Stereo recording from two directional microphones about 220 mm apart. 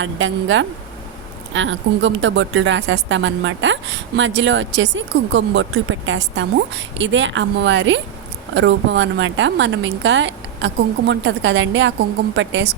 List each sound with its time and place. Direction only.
0.0 s a woman's voice: 60° right (ahead or behind)